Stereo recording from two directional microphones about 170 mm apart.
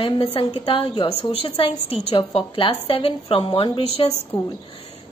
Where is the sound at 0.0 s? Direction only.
35° left (ahead or behind).